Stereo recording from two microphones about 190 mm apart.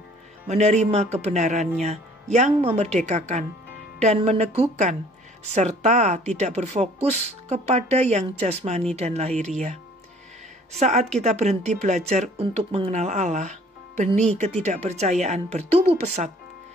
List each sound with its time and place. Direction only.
0.5 s speech: 35° right (ahead or behind)
10.8 s speech: 35° right (ahead or behind)